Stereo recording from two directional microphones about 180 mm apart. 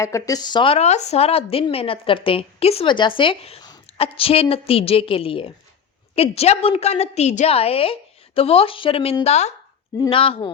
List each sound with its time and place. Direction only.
0.0 s a woman's voice: 20° left (ahead or behind)